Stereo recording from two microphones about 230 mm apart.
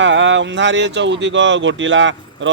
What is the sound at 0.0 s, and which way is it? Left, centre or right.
Speech, right.